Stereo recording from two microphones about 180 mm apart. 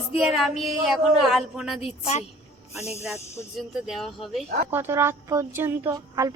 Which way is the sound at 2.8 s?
35° left (ahead or behind).